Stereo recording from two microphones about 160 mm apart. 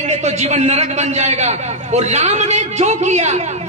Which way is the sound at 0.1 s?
45° right (ahead or behind).